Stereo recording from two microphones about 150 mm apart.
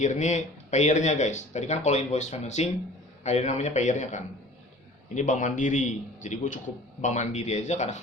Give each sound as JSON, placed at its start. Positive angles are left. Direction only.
{"t": 0.0, "sound": "a man's voice", "side_deg": 50}